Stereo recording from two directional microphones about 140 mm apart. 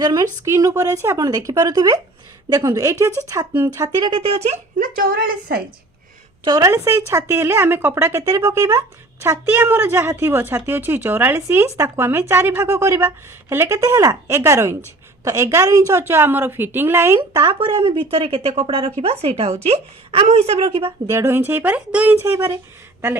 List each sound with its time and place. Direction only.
0.0 s speech: 25° right (ahead or behind)
3.8 s speech: 35° right (ahead or behind)
4.8 s a woman's voice: 90° right
6.4 s speech: 25° right (ahead or behind)
17.2 s speech: 25° right (ahead or behind)
17.6 s speech: 40° right (ahead or behind)
20.8 s speech: 20° right (ahead or behind)